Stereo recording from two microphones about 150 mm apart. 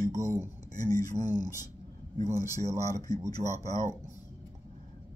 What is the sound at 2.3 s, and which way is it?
Speech, 20° right (ahead or behind).